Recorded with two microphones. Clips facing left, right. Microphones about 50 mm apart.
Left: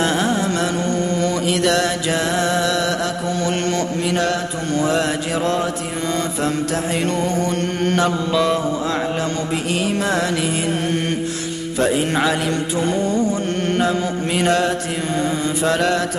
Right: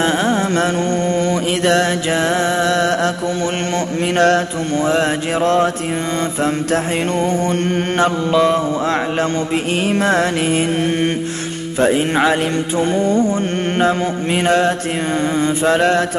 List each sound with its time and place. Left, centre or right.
0.0 s music: right
4.7 s music: right
6.7 s mantra: right
9.2 s music: right
11.8 s mantra: right